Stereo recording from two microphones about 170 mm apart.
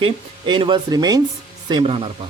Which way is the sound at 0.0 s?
30° right (ahead or behind).